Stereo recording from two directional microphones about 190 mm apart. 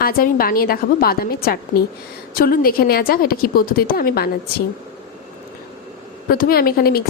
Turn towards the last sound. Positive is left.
turn(degrees=55)  # may be behind; listen again after turning